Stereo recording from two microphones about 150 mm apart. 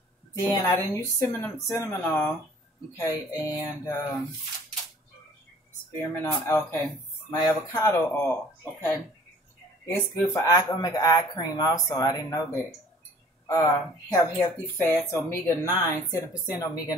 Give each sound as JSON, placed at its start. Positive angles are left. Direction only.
{"t": 0.3, "sound": "speech", "side_deg": 25}
{"t": 3.0, "sound": "speech", "side_deg": 25}
{"t": 5.9, "sound": "speech", "side_deg": 10}
{"t": 9.8, "sound": "speech", "side_deg": 25}